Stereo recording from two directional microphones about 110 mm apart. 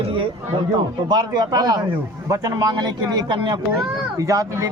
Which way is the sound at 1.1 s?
40° right (ahead or behind).